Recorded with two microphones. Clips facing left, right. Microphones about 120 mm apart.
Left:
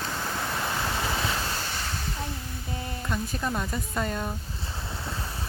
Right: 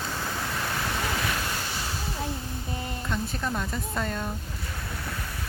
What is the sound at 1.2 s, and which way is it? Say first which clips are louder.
Waves: even; 25° left (ahead or behind).